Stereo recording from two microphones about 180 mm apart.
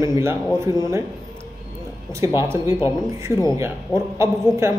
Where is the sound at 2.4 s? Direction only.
15° right (ahead or behind).